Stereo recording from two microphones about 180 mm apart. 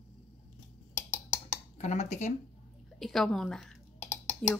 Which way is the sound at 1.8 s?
40° left (ahead or behind).